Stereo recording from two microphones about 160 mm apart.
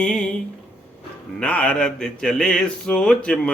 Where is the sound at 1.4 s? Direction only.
10° left (ahead or behind).